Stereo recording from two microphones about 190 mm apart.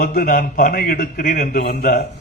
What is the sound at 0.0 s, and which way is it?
A man's voice, 50° left (ahead or behind).